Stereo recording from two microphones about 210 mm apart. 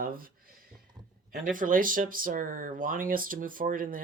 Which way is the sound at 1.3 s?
40° right (ahead or behind).